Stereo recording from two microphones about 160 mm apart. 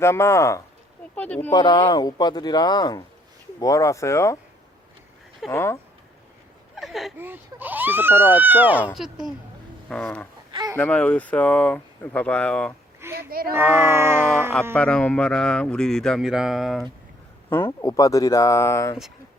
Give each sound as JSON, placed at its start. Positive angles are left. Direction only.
{"t": 0.0, "sound": "speech", "side_deg": 15}
{"t": 1.5, "sound": "speech", "side_deg": 30}
{"t": 5.5, "sound": "speech", "side_deg": 15}
{"t": 6.7, "sound": "a sound", "side_deg": 0}
{"t": 7.2, "sound": "speech", "side_deg": -10}
{"t": 10.5, "sound": "a sound", "side_deg": -25}
{"t": 10.8, "sound": "speech", "side_deg": 10}
{"t": 13.1, "sound": "speech", "side_deg": -70}
{"t": 13.6, "sound": "speech", "side_deg": -15}
{"t": 14.8, "sound": "speech", "side_deg": 5}
{"t": 17.7, "sound": "speech", "side_deg": 20}